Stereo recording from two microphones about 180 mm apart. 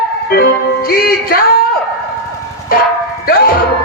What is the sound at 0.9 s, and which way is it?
Music, 55° left (ahead or behind).